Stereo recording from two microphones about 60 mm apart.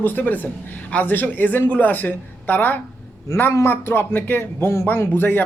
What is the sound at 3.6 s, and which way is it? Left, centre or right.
A man's voice, left.